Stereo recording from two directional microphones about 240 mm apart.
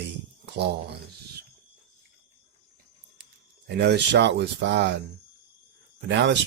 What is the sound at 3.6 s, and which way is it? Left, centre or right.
Speech, right.